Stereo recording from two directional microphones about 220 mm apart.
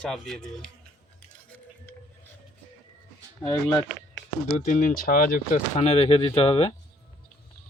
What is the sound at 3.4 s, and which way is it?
Speech, 15° left (ahead or behind).